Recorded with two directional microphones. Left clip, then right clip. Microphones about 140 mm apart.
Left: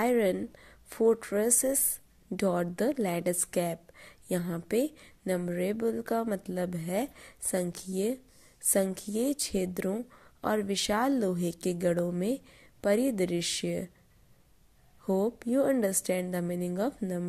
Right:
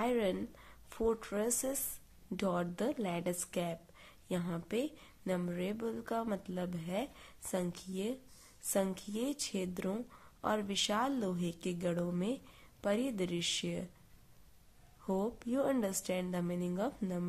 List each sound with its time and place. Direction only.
0.0 s a woman's voice: 30° left (ahead or behind)
15.0 s a woman's voice: 25° left (ahead or behind)